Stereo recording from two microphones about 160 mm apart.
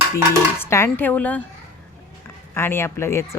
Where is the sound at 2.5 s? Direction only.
15° left (ahead or behind).